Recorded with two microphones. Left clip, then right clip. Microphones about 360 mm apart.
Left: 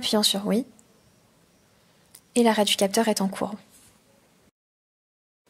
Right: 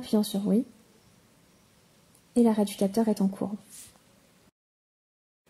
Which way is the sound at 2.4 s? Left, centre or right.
Left.